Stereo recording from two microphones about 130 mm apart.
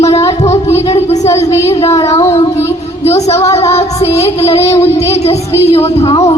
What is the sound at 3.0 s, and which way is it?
Speech, 55° left (ahead or behind).